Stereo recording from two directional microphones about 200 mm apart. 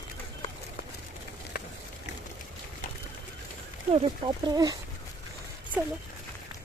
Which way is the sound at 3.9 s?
25° right (ahead or behind).